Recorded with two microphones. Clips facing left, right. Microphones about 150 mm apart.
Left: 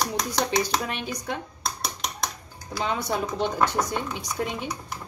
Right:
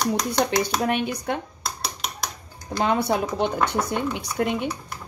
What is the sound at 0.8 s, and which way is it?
Speech, 60° right (ahead or behind).